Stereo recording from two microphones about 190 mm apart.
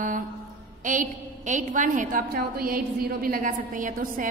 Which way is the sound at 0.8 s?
40° right (ahead or behind).